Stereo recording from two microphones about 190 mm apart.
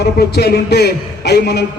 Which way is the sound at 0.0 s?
60° left (ahead or behind).